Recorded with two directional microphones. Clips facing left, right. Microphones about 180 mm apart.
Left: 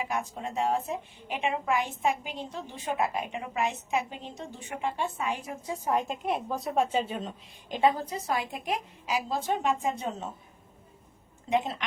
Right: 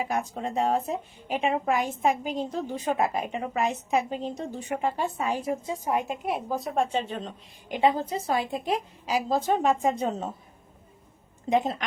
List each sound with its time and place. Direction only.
0.0 s speech: 40° right (ahead or behind)
5.6 s a woman's voice: 10° right (ahead or behind); by 7.3 s 5° left (ahead or behind)
7.7 s speech: 20° right (ahead or behind); by 10.3 s 35° right (ahead or behind)
11.4 s speech: 40° right (ahead or behind)